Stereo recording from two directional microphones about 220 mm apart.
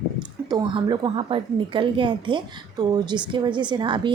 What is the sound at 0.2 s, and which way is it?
A woman's voice, 20° right (ahead or behind).